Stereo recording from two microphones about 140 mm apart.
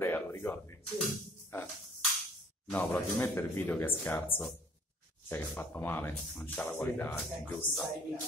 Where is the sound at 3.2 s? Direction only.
15° left (ahead or behind).